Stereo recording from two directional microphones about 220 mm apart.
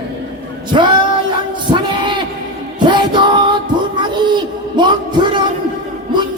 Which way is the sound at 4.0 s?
20° right (ahead or behind).